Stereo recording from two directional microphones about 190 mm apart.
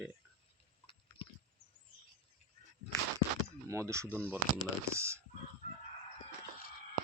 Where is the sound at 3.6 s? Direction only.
15° right (ahead or behind).